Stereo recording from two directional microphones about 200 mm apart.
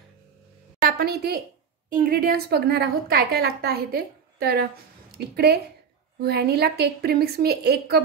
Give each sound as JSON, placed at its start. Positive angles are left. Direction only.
{"t": 0.8, "sound": "a woman's voice", "side_deg": -50}